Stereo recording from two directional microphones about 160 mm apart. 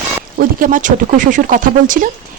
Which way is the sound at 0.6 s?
55° right (ahead or behind).